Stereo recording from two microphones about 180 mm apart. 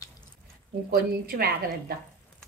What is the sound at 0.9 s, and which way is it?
A woman's voice, 55° right (ahead or behind).